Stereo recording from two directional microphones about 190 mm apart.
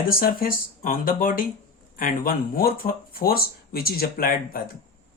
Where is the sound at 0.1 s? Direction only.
50° left (ahead or behind).